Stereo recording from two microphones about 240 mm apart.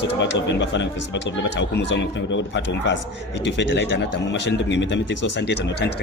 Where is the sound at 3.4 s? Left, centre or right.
Left.